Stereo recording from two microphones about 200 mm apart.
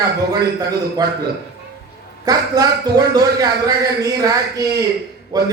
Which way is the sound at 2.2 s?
20° right (ahead or behind).